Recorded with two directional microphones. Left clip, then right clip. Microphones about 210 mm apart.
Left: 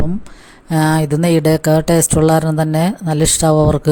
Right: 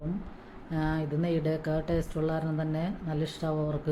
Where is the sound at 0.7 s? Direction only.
50° left (ahead or behind).